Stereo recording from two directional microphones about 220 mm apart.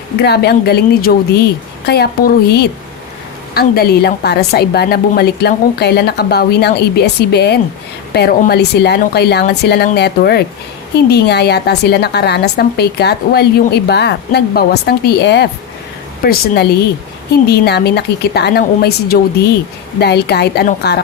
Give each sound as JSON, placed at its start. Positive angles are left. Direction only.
{"t": 0.2, "sound": "a woman's voice", "side_deg": 45}